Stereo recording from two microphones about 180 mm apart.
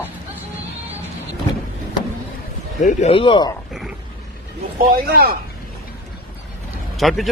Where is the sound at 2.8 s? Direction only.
35° left (ahead or behind).